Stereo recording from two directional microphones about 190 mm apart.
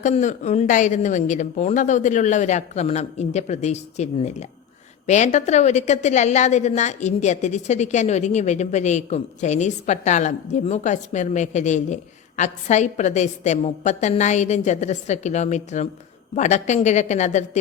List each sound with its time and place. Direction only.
0.0 s a woman's voice: 40° left (ahead or behind)